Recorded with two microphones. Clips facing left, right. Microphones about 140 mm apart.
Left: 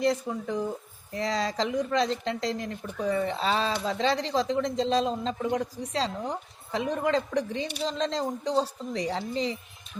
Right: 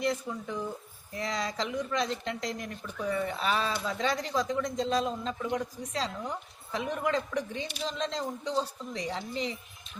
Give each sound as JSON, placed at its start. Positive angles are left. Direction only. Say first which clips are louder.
{"t": 0.0, "sound": "speech", "louder": "left 5 dB", "side_deg": 35}